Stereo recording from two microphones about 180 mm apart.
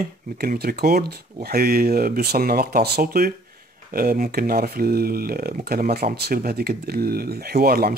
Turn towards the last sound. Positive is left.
turn(degrees=-60)  # may be behind; listen again after turning